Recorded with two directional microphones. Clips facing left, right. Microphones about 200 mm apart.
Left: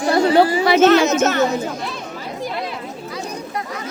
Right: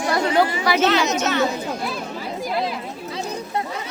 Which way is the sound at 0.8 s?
45° left (ahead or behind).